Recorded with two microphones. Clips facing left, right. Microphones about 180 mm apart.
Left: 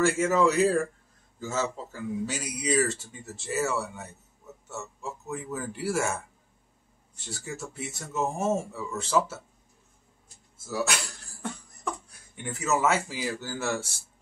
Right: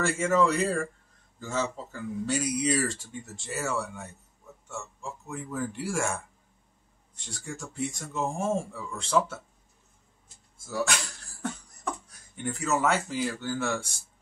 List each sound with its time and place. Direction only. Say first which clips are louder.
0.0 s speech: left 2 dB; centre (ahead or behind)
10.7 s speech: even; 5° left (ahead or behind)
12.4 s speech: left 1 dB; 5° left (ahead or behind)